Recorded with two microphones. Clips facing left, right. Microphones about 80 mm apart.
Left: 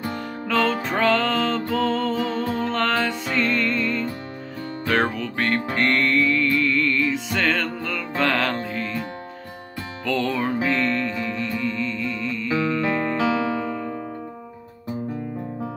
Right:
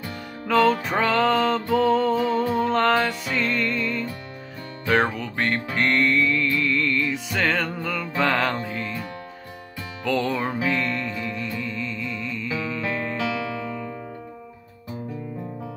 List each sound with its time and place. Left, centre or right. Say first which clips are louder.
0.5 s music: right 3 dB; centre
10.0 s music: left 1 dB; centre
13.2 s music: left 5 dB; left